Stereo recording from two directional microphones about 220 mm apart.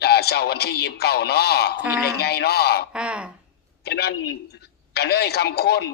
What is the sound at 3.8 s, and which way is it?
A man's voice, 45° left (ahead or behind).